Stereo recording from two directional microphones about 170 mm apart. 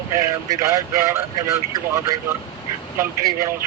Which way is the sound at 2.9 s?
15° right (ahead or behind).